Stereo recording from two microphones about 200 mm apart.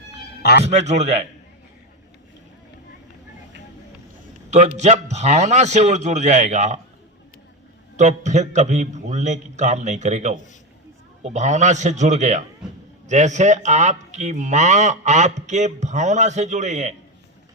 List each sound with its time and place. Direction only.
0.6 s speech: 35° right (ahead or behind)
4.5 s speech: 35° right (ahead or behind)
7.9 s speech: 35° right (ahead or behind)